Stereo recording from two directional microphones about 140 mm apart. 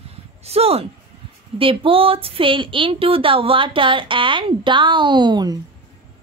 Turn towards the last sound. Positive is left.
turn(degrees=-30)  # may be behind; listen again after turning